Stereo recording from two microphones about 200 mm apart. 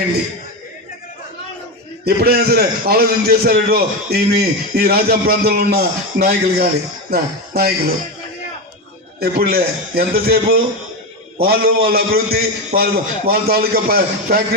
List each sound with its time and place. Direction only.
2.0 s a man's voice: 50° right (ahead or behind)
7.1 s music: 50° right (ahead or behind)
9.2 s a man's voice: 50° right (ahead or behind)